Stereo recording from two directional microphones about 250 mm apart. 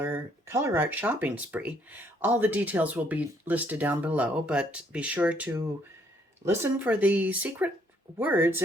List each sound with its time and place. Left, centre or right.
0.0 s speech: centre